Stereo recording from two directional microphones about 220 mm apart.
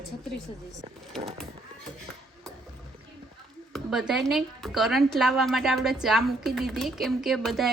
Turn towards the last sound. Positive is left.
turn(degrees=0)  # may be behind; listen again after turning